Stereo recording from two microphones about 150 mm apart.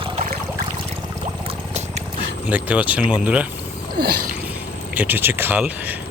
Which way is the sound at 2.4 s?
10° right (ahead or behind).